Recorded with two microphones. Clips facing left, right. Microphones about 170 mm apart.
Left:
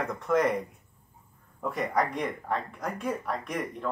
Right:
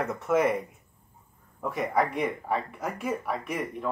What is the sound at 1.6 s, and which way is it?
Speech, centre (ahead or behind).